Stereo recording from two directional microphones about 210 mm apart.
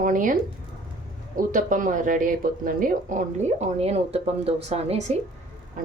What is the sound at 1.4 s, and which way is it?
Speech, 40° right (ahead or behind).